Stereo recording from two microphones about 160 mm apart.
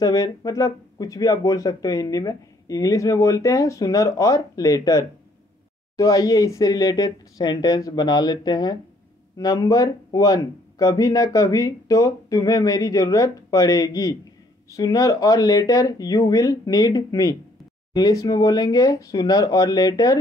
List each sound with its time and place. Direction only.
0.0 s speech: 25° left (ahead or behind)